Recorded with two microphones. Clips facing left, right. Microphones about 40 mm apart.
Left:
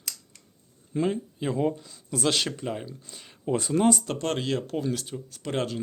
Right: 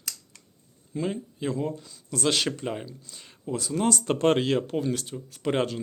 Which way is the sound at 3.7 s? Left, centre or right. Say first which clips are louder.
Left 3 dB; centre.